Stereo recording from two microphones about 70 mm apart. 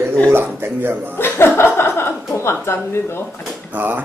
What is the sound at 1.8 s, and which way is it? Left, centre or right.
Chuckle, left.